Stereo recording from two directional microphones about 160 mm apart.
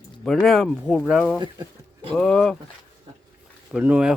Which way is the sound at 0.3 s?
Centre (ahead or behind).